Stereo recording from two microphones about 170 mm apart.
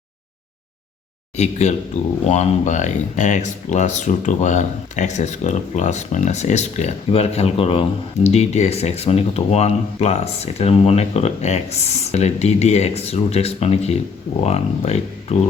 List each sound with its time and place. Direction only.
1.4 s speech: 40° left (ahead or behind)